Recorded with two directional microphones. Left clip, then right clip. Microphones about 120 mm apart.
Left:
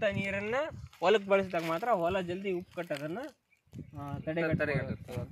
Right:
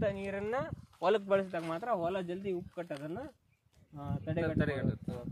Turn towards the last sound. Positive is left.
turn(degrees=70)  # may be behind; listen again after turning